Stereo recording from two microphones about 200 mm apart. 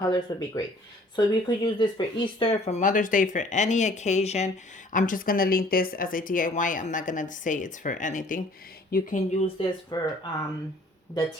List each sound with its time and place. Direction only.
0.0 s speech: 20° left (ahead or behind); by 9.6 s 35° left (ahead or behind)
9.9 s speech: 20° left (ahead or behind)